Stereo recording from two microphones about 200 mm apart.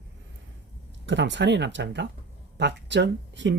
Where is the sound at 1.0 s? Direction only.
65° right (ahead or behind).